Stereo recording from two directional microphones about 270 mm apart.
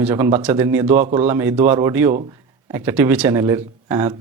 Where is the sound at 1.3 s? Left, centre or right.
Centre.